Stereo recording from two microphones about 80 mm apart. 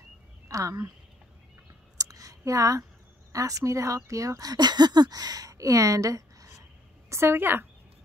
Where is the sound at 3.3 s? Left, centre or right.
Right.